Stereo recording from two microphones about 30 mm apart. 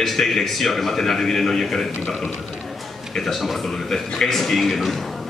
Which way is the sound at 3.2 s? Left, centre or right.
Centre.